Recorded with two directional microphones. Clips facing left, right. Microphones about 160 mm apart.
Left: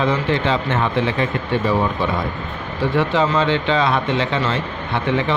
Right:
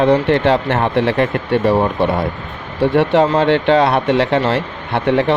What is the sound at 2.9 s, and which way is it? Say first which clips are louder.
Speech: right 5 dB; 65° right (ahead or behind).